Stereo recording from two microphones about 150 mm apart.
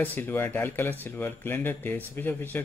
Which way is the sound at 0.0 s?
10° left (ahead or behind).